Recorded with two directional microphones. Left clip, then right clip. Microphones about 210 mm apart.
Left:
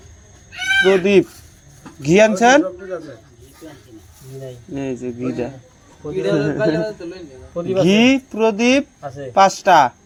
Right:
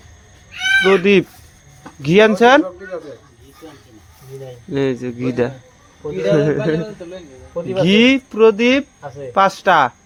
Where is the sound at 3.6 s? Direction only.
35° right (ahead or behind).